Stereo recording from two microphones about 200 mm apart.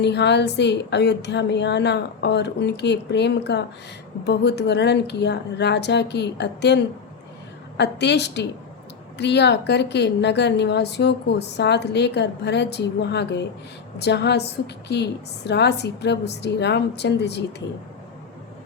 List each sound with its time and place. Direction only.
0.0 s a woman's voice: 60° left (ahead or behind)